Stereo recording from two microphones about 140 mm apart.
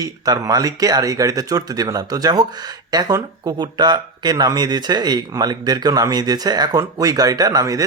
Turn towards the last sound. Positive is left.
turn(degrees=-25)  # may be behind; listen again after turning